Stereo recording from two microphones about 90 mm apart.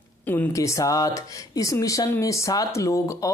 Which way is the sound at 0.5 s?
35° left (ahead or behind).